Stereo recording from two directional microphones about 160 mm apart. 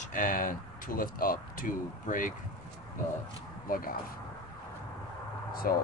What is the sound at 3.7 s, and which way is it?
Speech, 65° left (ahead or behind).